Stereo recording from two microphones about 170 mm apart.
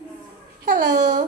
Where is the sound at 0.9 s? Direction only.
45° right (ahead or behind).